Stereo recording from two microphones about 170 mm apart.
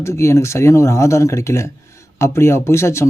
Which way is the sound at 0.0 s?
15° left (ahead or behind).